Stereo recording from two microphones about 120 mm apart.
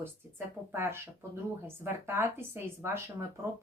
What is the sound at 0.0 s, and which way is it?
A woman's voice, 20° right (ahead or behind).